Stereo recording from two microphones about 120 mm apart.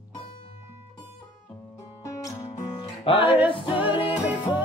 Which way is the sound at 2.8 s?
50° left (ahead or behind).